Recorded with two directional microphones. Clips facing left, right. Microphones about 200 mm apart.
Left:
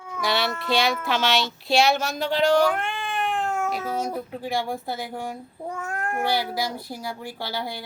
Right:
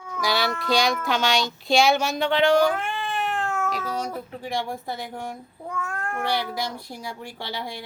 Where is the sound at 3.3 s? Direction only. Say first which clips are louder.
Left 1 dB; 15° left (ahead or behind).